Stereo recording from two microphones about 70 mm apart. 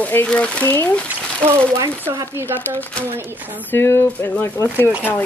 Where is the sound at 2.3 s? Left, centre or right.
Right.